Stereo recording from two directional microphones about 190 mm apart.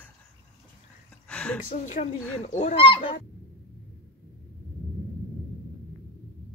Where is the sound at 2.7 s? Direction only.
30° left (ahead or behind).